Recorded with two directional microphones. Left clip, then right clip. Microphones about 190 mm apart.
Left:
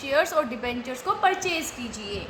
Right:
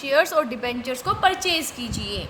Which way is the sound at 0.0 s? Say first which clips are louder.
Right 3 dB; 45° right (ahead or behind).